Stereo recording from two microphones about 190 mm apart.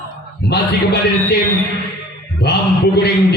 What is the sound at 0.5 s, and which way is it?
Speech, 60° left (ahead or behind).